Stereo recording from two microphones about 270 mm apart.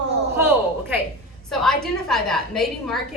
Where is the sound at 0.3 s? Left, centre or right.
Centre.